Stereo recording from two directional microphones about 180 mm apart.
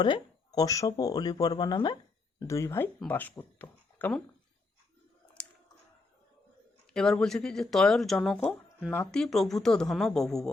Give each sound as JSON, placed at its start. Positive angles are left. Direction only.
{"t": 0.0, "sound": "speech", "side_deg": 20}
{"t": 5.4, "sound": "a sound", "side_deg": 5}
{"t": 6.9, "sound": "speech", "side_deg": 5}